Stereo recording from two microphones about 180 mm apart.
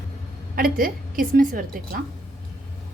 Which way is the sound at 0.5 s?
50° right (ahead or behind).